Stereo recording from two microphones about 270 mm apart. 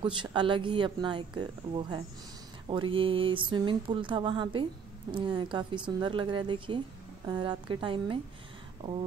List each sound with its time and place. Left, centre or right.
0.0 s speech: centre
2.7 s a sound: centre
5.1 s speech: centre